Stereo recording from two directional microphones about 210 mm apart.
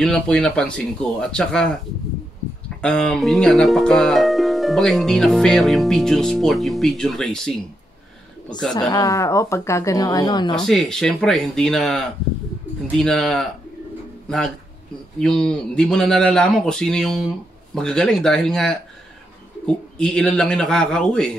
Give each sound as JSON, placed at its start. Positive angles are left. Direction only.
{"t": 0.0, "sound": "speech", "side_deg": 5}
{"t": 2.8, "sound": "speech", "side_deg": 5}
{"t": 8.7, "sound": "speech", "side_deg": 20}
{"t": 10.5, "sound": "speech", "side_deg": 0}
{"t": 15.1, "sound": "speech", "side_deg": 5}